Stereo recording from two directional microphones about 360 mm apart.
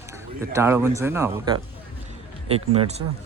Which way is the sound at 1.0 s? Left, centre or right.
Centre.